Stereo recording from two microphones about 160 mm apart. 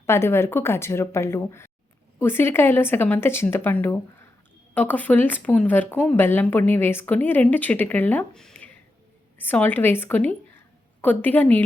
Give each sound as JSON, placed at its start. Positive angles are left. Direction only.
{"t": 0.0, "sound": "speech", "side_deg": 15}